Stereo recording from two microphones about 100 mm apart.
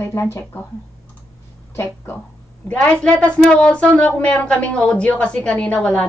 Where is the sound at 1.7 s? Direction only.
20° left (ahead or behind).